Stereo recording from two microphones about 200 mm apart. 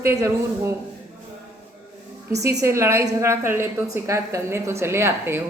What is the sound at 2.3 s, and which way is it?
A woman's voice, 15° right (ahead or behind).